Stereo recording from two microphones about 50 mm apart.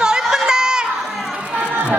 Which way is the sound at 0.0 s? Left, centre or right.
Centre.